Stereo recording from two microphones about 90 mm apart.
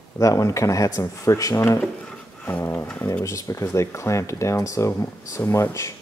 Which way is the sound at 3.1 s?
35° left (ahead or behind).